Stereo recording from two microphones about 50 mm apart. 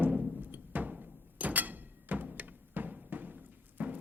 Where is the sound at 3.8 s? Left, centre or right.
Right.